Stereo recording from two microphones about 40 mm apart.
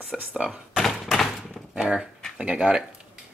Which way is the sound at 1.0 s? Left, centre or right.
Centre.